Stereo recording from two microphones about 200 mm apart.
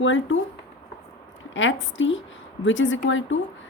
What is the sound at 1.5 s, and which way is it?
Speech, 70° left (ahead or behind).